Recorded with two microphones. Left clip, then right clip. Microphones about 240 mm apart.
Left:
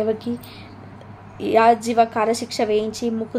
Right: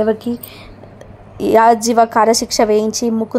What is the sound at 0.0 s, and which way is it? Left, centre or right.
Speech, right.